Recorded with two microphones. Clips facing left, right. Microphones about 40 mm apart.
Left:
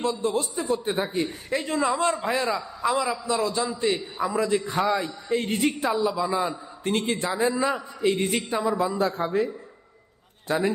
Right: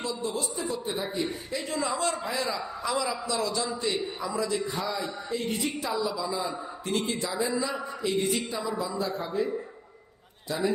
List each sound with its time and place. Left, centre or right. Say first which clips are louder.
0.0 s a man's voice: left 6 dB; left
10.5 s a man's voice: left 6 dB; left